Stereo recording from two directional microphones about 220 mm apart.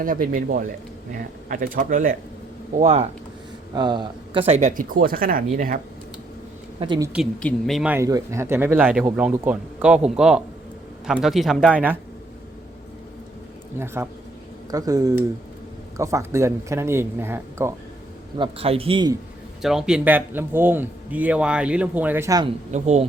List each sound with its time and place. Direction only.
0.0 s speech: 40° right (ahead or behind)
3.8 s speech: 20° right (ahead or behind); by 5.8 s 40° right (ahead or behind)
6.7 s a man's voice: 20° right (ahead or behind)
7.1 s speech: centre (ahead or behind)
13.7 s speech: 10° right (ahead or behind)
18.3 s a man's voice: 25° right (ahead or behind)
19.6 s speech: 5° right (ahead or behind)
22.7 s speech: 30° right (ahead or behind)